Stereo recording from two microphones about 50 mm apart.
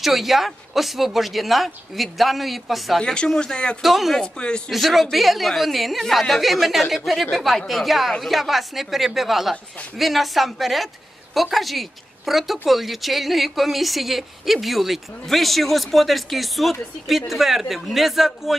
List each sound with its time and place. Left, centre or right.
0.0 s speech: centre
3.0 s speech: centre
3.8 s speech: centre
4.2 s speech: centre
4.6 s speech: centre